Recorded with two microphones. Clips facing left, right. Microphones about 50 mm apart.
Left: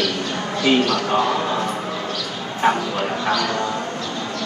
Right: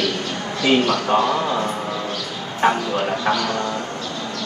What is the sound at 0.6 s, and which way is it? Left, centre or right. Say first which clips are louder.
Speech: right 1 dB; centre.